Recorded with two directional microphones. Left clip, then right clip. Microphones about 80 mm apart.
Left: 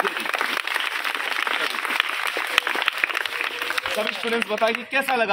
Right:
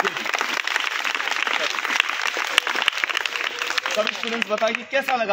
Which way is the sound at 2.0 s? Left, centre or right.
Centre.